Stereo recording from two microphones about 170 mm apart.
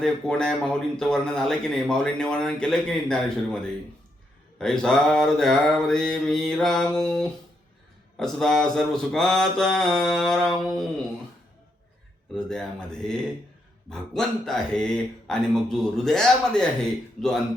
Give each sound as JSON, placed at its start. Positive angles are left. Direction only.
{"t": 0.0, "sound": "speech", "side_deg": 5}
{"t": 12.3, "sound": "speech", "side_deg": 5}
{"t": 13.9, "sound": "speech", "side_deg": 0}